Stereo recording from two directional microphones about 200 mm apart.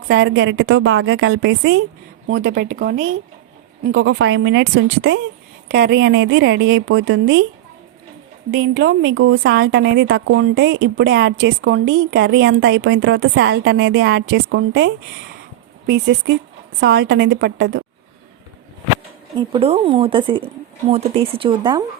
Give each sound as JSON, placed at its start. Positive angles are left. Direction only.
{"t": 0.1, "sound": "speech", "side_deg": -70}
{"t": 3.9, "sound": "speech", "side_deg": -75}
{"t": 8.4, "sound": "speech", "side_deg": -65}
{"t": 19.4, "sound": "speech", "side_deg": -30}